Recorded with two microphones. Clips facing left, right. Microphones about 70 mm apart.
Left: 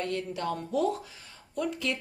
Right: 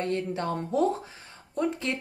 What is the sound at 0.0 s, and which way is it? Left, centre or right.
A woman's voice, right.